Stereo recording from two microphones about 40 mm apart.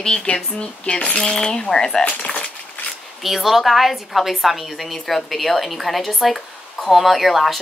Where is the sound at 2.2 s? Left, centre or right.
Left.